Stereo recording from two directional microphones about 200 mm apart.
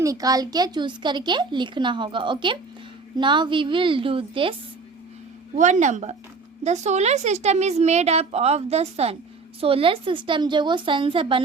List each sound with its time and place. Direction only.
0.0 s speech: 15° right (ahead or behind)
5.5 s a woman's voice: 40° right (ahead or behind)